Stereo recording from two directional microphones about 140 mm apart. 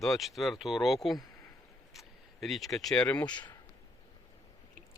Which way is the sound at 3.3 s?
30° left (ahead or behind).